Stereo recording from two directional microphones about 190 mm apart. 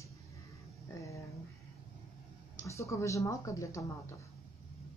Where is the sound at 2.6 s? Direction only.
15° left (ahead or behind).